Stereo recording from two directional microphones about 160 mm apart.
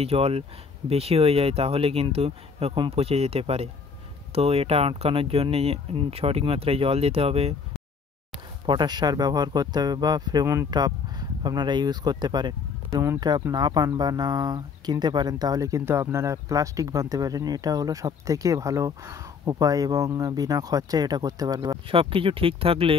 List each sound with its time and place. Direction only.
0.0 s speech: 40° right (ahead or behind)
8.6 s speech: 25° right (ahead or behind)
21.9 s speech: 35° right (ahead or behind)